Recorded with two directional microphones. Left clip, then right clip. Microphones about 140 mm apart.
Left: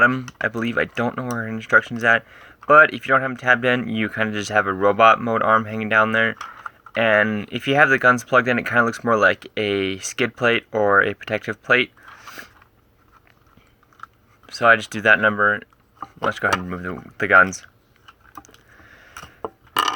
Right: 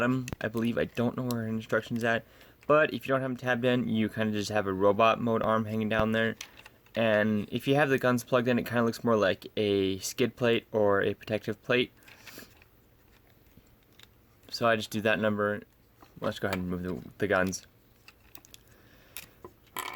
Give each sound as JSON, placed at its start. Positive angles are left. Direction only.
{"t": 0.0, "sound": "speech", "side_deg": -40}
{"t": 14.4, "sound": "speech", "side_deg": -40}